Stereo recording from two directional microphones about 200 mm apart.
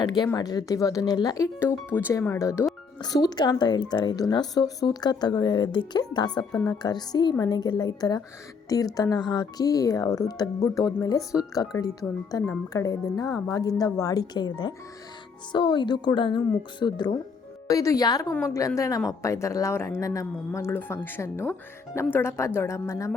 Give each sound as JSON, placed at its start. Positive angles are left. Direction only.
{"t": 0.0, "sound": "speech", "side_deg": 20}